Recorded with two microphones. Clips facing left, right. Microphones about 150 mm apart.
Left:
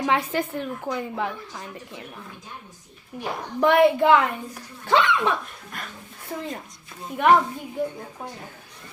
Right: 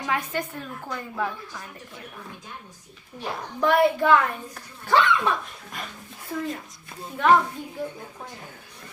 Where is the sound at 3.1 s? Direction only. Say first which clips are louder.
Left 2 dB; 10° left (ahead or behind).